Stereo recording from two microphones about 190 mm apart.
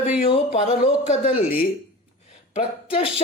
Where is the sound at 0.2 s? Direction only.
35° left (ahead or behind).